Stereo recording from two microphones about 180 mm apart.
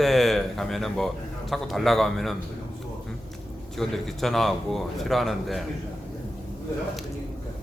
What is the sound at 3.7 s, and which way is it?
A man's voice, centre (ahead or behind).